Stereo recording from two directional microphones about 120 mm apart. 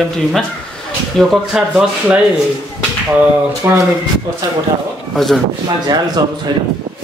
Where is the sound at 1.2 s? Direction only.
5° left (ahead or behind).